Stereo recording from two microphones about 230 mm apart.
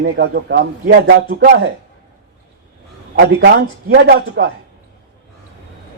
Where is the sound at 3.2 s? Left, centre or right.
Right.